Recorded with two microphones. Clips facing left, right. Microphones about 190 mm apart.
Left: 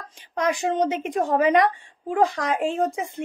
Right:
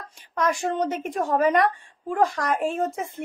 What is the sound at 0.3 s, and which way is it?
Speech, 20° left (ahead or behind).